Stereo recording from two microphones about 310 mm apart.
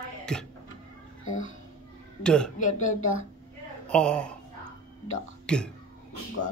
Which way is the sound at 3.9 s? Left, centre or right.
Centre.